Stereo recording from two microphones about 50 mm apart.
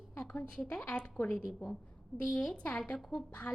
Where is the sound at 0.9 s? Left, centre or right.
Left.